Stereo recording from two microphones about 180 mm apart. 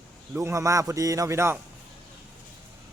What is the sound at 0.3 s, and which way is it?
A man's voice, 15° right (ahead or behind).